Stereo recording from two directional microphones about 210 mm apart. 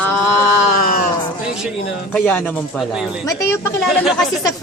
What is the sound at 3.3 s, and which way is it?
Speech, 15° left (ahead or behind).